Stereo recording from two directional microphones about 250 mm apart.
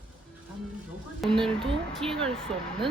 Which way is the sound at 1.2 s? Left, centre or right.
Centre.